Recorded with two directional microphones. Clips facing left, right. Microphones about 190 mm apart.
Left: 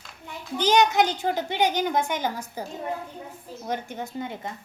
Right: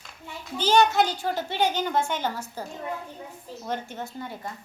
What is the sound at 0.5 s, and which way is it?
A woman's voice, 15° left (ahead or behind).